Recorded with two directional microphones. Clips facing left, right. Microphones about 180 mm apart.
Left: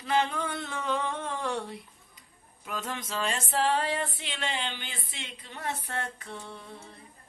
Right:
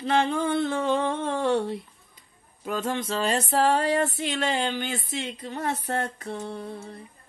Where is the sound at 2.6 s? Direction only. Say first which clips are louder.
Right 8 dB; 30° right (ahead or behind).